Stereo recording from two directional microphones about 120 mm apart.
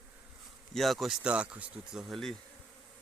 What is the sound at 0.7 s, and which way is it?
Speech, centre (ahead or behind).